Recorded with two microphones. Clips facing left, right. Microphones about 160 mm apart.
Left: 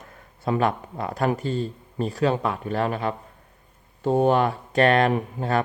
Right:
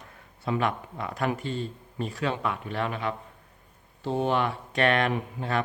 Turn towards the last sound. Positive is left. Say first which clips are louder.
# left 5 dB
turn(degrees=40)  # may be behind; listen again after turning